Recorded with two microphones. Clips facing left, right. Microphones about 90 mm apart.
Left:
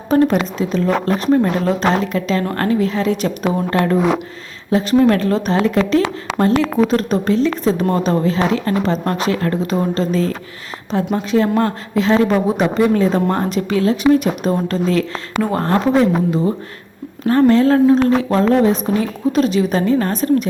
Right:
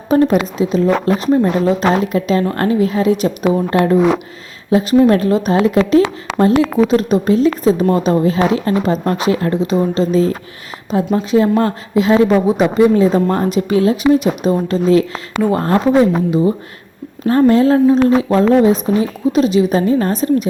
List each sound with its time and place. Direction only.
0.1 s a woman's voice: 10° right (ahead or behind)
9.5 s a woman's voice: centre (ahead or behind)
13.6 s a woman's voice: 20° right (ahead or behind)
13.9 s a woman's voice: 5° right (ahead or behind)